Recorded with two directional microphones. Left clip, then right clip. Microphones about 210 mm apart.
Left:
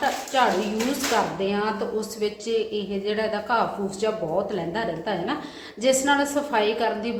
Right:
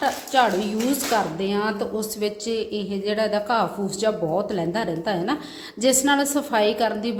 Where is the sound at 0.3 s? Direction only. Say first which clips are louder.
Right 2 dB; 50° right (ahead or behind).